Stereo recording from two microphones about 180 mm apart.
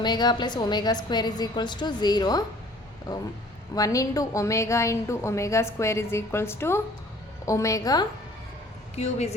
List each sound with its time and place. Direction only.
0.0 s a woman's voice: 25° left (ahead or behind)
3.8 s a woman's voice: 20° left (ahead or behind)
9.0 s speech: 40° left (ahead or behind)